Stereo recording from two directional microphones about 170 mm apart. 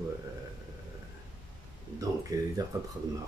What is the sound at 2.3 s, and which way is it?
Mantra, 20° right (ahead or behind).